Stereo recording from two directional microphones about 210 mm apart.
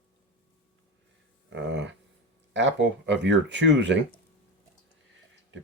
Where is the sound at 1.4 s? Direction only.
60° right (ahead or behind).